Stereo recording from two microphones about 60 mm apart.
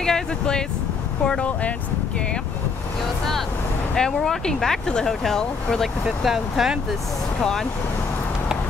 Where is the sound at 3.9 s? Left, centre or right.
Centre.